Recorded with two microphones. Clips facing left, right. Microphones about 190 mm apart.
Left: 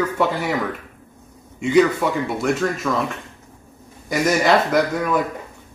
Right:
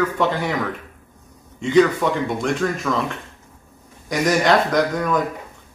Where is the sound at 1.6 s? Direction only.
10° left (ahead or behind).